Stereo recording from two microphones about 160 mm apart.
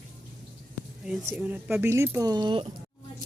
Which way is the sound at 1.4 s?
10° right (ahead or behind).